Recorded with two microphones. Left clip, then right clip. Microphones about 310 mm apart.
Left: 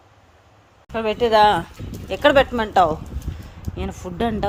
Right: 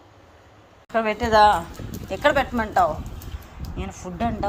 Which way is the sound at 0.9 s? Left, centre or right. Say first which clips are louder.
Left 2 dB; centre.